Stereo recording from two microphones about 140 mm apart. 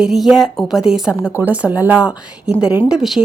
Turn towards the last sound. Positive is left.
turn(degrees=0)  # may be behind; listen again after turning